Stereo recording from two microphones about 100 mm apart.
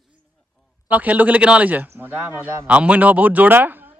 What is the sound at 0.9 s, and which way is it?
A man's voice, 15° right (ahead or behind).